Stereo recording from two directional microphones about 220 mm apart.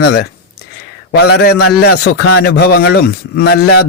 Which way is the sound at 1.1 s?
50° left (ahead or behind).